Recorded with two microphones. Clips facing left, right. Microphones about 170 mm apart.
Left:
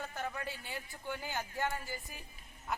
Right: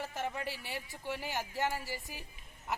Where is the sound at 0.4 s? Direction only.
80° right.